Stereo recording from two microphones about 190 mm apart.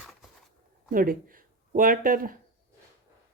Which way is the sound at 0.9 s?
50° right (ahead or behind).